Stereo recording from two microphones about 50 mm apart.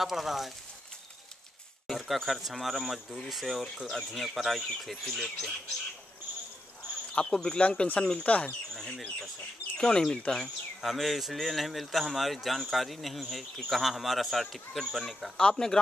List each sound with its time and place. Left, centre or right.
0.0 s speech: centre
1.9 s speech: centre
7.2 s speech: centre
7.6 s speech: left
9.8 s speech: centre
10.8 s speech: centre
15.3 s speech: centre